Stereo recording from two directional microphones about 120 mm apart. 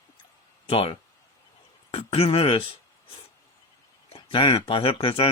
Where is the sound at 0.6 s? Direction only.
50° left (ahead or behind).